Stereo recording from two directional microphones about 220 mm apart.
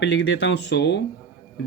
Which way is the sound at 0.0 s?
50° left (ahead or behind).